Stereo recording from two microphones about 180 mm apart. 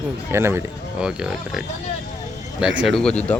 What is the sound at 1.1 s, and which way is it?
Speech, 5° right (ahead or behind).